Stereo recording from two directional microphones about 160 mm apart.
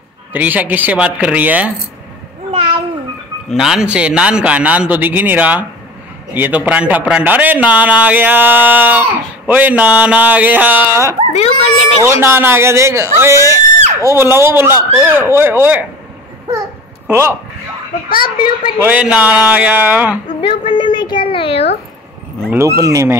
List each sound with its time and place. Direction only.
0.3 s a man's voice: 10° right (ahead or behind)
3.4 s a man's voice: 5° right (ahead or behind)
11.3 s a woman's voice: 40° left (ahead or behind)
12.0 s a man's voice: 15° right (ahead or behind)
17.1 s a man's voice: 15° right (ahead or behind)
18.2 s a child's voice: 30° left (ahead or behind)
18.8 s a man's voice: 10° right (ahead or behind)
20.2 s a woman's voice: 35° left (ahead or behind)
22.5 s speech: 20° right (ahead or behind)